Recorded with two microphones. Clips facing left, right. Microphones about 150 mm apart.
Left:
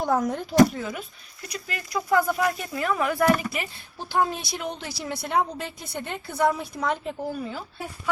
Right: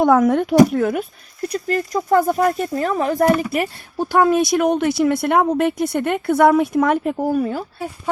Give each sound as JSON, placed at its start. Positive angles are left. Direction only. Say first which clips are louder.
{"t": 0.0, "sound": "speech", "louder": "right 10 dB", "side_deg": -70}
{"t": 0.7, "sound": "speech", "louder": "right 13 dB", "side_deg": -60}
{"t": 1.5, "sound": "speech", "louder": "right 10 dB", "side_deg": -40}
{"t": 3.5, "sound": "speech", "louder": "right 11 dB", "side_deg": -55}
{"t": 4.1, "sound": "speech", "louder": "right 10 dB", "side_deg": -70}